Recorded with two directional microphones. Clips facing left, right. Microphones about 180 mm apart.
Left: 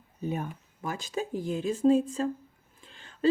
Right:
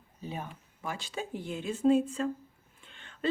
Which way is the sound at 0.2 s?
50° left (ahead or behind).